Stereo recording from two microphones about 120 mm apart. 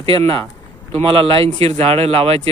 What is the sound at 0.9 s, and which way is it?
Speech, 50° right (ahead or behind).